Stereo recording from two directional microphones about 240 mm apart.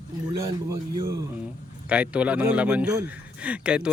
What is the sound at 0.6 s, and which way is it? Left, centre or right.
Speech, centre.